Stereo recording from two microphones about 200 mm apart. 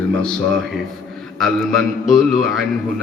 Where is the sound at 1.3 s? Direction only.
Centre (ahead or behind).